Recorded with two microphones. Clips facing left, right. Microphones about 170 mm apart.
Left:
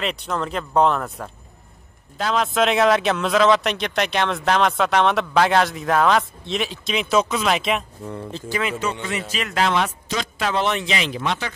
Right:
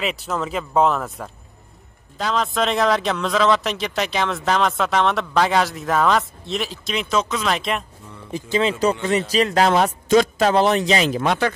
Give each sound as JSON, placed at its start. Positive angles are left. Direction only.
{"t": 0.0, "sound": "a man's voice", "side_deg": -5}
{"t": 8.3, "sound": "speech", "side_deg": -15}
{"t": 8.5, "sound": "speech", "side_deg": -35}